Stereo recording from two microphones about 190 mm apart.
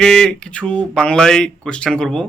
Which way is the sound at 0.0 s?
5° left (ahead or behind).